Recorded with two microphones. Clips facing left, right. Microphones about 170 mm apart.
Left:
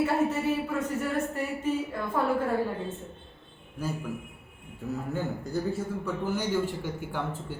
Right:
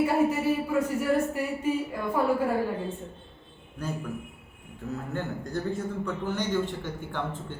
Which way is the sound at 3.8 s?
5° left (ahead or behind).